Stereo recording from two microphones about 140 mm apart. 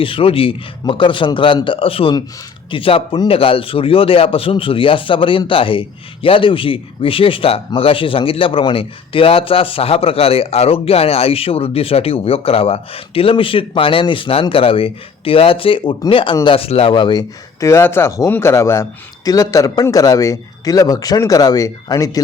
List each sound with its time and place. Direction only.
0.0 s speech: 40° left (ahead or behind)